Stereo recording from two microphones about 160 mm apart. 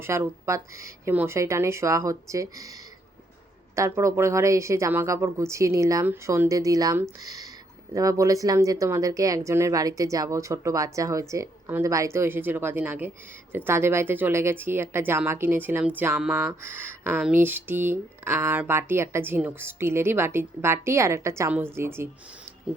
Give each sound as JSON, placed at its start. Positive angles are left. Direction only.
{"t": 0.0, "sound": "speech", "side_deg": -15}
{"t": 3.8, "sound": "speech", "side_deg": -20}